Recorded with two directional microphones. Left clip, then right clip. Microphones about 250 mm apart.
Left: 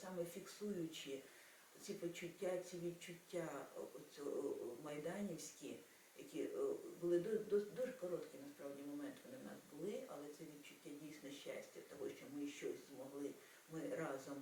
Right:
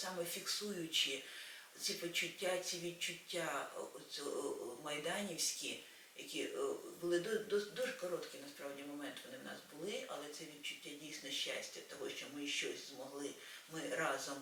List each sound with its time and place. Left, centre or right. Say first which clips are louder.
0.1 s speech: right 7 dB; centre
4.9 s speech: right 8 dB; centre